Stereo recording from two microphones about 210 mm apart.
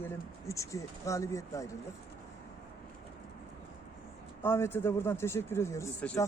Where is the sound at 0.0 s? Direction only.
15° left (ahead or behind).